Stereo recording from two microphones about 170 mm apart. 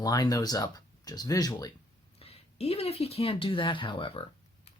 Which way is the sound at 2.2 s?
35° left (ahead or behind).